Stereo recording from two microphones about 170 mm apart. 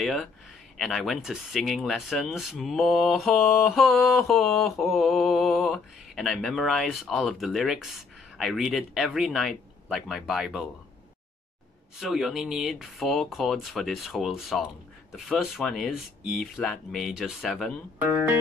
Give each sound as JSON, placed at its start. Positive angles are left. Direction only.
{"t": 0.0, "sound": "speech", "side_deg": 0}
{"t": 12.0, "sound": "speech", "side_deg": 0}
{"t": 18.0, "sound": "music", "side_deg": -10}